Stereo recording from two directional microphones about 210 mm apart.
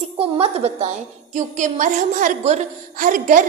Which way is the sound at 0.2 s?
30° right (ahead or behind).